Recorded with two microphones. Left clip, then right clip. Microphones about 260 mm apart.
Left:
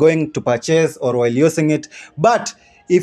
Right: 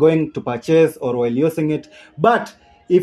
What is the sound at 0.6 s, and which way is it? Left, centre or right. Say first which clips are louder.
A man's voice: right 5 dB; left.